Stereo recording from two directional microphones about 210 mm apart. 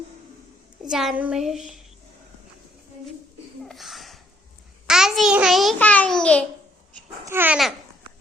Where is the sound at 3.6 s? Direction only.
Centre (ahead or behind).